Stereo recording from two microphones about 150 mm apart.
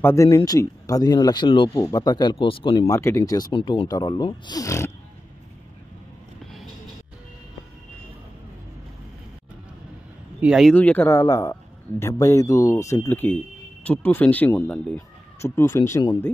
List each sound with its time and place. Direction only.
0.0 s speech: 20° left (ahead or behind)
1.7 s speech: 20° left (ahead or behind); by 2.9 s 40° left (ahead or behind)
2.9 s speech: 20° left (ahead or behind)
6.4 s vehicle: centre (ahead or behind)
10.4 s speech: centre (ahead or behind)
11.1 s speech: 20° left (ahead or behind)